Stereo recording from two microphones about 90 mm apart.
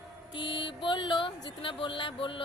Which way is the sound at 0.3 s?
65° left (ahead or behind).